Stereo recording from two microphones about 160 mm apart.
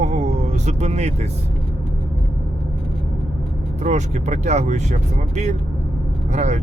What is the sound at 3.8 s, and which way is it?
Speech, 45° right (ahead or behind).